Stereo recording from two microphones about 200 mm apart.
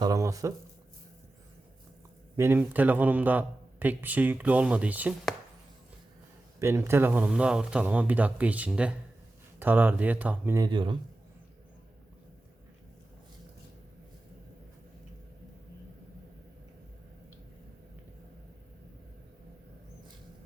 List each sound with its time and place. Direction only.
0.0 s a sound: 15° right (ahead or behind)
2.3 s a man's voice: 10° right (ahead or behind)
6.6 s a man's voice: 15° right (ahead or behind)